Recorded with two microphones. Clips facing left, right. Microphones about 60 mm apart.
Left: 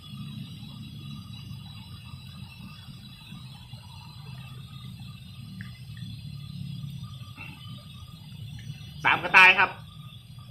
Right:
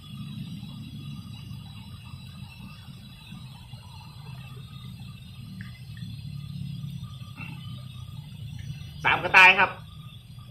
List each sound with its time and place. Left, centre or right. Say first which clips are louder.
9.0 s speech: right 1 dB; centre